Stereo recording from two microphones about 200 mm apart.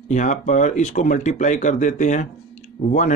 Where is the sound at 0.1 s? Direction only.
40° left (ahead or behind).